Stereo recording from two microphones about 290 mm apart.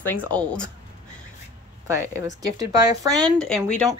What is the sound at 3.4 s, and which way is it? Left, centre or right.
Speech, centre.